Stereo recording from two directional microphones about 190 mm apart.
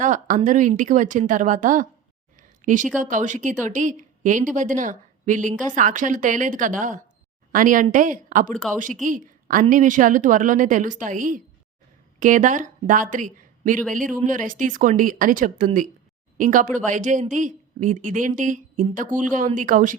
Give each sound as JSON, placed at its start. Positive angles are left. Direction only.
{"t": 0.0, "sound": "a woman's voice", "side_deg": -40}